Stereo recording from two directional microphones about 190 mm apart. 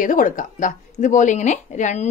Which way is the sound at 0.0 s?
45° left (ahead or behind).